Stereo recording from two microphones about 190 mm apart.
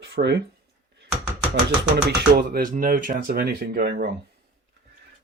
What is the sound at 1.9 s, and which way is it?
Speech, 50° right (ahead or behind).